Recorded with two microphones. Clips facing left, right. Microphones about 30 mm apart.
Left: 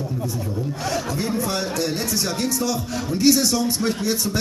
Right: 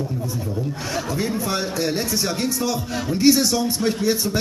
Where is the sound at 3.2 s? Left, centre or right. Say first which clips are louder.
Right 1 dB; centre.